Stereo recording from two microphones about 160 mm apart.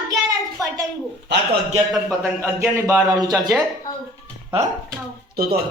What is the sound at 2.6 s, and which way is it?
Speech, 20° right (ahead or behind).